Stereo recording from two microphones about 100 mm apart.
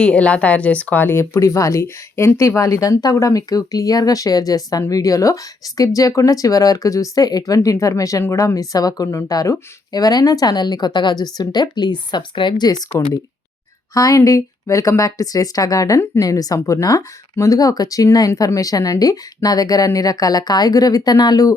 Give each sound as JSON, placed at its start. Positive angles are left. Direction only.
{"t": 0.0, "sound": "speech", "side_deg": 10}